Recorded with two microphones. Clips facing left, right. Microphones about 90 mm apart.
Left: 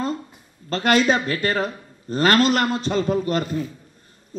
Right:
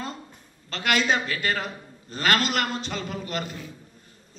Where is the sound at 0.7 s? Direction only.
40° left (ahead or behind).